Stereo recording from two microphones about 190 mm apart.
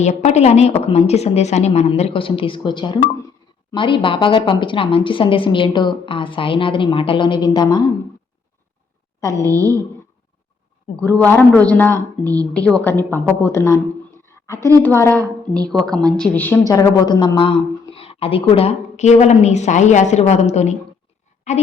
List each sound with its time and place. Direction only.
0.0 s a woman's voice: 35° left (ahead or behind)
9.4 s a woman's voice: 20° right (ahead or behind)
11.2 s speech: 10° left (ahead or behind)
12.2 s a woman's voice: 20° right (ahead or behind)
12.5 s speech: 5° left (ahead or behind)
14.3 s a sound: 15° left (ahead or behind)
14.8 s speech: 10° left (ahead or behind)
15.2 s a woman's voice: 20° right (ahead or behind)
15.7 s a woman's voice: centre (ahead or behind); by 21.6 s 40° left (ahead or behind)